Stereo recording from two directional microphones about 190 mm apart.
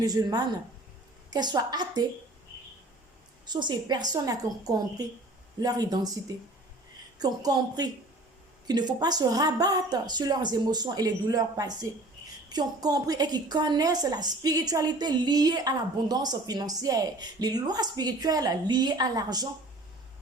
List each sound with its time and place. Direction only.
0.0 s a woman's voice: 20° right (ahead or behind)
3.4 s a woman's voice: 25° right (ahead or behind)